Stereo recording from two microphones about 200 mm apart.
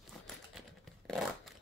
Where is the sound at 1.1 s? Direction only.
Centre (ahead or behind).